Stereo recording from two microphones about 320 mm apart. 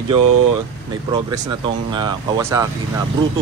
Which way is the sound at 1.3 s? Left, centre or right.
Centre.